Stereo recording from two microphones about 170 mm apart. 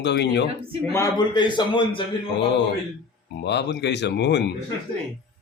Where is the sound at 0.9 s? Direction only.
20° left (ahead or behind).